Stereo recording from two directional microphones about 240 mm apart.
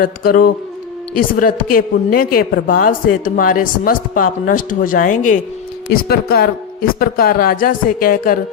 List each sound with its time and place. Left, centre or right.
0.0 s a woman's voice: left